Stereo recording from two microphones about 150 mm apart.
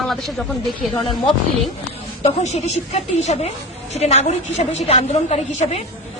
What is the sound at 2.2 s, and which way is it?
A woman's voice, 50° left (ahead or behind).